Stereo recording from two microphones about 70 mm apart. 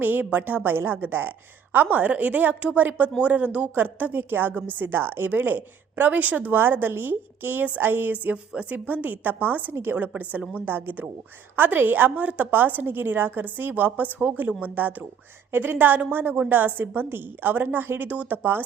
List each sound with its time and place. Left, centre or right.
0.0 s a woman's voice: right